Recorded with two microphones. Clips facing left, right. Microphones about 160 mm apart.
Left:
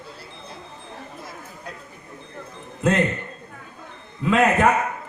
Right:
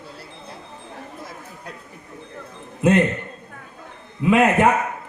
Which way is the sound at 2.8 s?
15° right (ahead or behind).